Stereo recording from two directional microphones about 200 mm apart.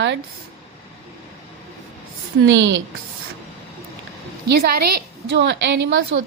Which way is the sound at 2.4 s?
65° right (ahead or behind).